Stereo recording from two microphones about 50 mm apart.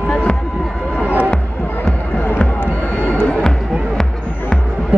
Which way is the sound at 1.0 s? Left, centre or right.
Right.